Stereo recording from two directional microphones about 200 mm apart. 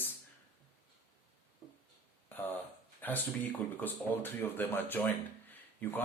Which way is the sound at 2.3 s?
10° left (ahead or behind).